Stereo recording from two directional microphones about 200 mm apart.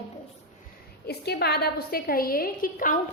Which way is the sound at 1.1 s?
55° left (ahead or behind).